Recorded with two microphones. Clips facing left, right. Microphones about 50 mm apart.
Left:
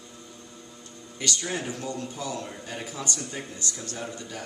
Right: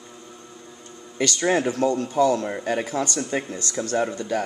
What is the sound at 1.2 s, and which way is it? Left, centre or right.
A man's voice, right.